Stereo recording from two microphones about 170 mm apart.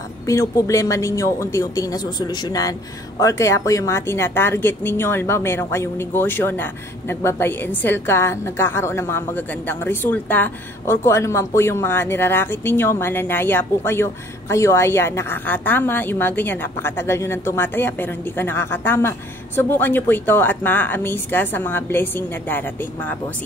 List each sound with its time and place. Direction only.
0.3 s a woman's voice: 15° left (ahead or behind)